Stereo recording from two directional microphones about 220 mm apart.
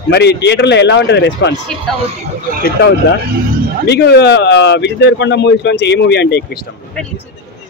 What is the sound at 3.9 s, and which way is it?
Speech, 50° left (ahead or behind).